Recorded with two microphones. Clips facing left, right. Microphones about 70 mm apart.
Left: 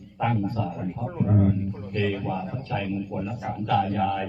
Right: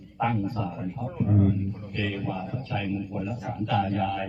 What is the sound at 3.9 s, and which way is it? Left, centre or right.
Speech, centre.